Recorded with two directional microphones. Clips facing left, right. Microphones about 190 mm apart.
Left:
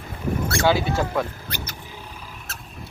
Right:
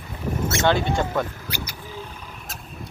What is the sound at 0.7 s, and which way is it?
Speech, 5° left (ahead or behind).